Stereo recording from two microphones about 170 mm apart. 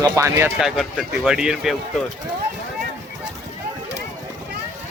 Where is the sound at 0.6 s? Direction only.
Centre (ahead or behind).